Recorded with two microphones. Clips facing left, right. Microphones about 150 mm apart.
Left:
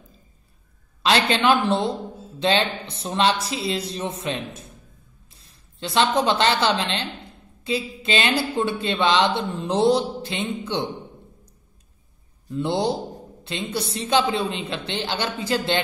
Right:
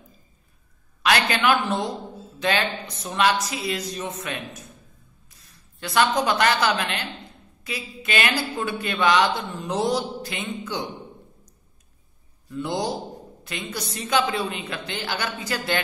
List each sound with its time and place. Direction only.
1.0 s a man's voice: 25° left (ahead or behind)
12.4 s a man's voice: 30° left (ahead or behind)